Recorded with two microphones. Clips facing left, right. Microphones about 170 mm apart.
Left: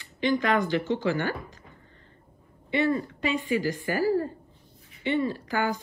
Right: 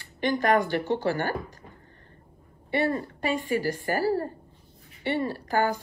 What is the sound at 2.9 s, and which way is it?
Speech, 45° right (ahead or behind).